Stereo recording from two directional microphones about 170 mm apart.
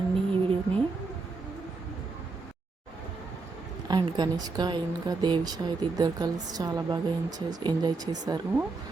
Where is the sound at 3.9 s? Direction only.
25° right (ahead or behind).